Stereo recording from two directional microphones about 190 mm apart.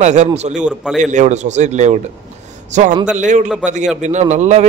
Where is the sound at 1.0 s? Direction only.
40° right (ahead or behind).